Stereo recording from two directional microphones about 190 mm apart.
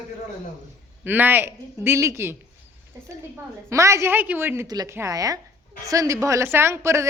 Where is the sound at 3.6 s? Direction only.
15° right (ahead or behind).